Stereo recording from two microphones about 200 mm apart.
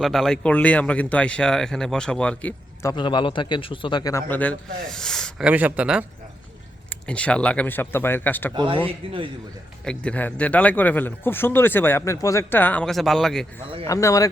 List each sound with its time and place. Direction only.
0.0 s speech: centre (ahead or behind)
2.9 s speech: 25° left (ahead or behind); by 6.1 s 5° right (ahead or behind)
6.9 s speech: 5° left (ahead or behind)
8.5 s a man's voice: 25° right (ahead or behind)
9.8 s speech: 5° left (ahead or behind)
13.8 s speech: 15° left (ahead or behind)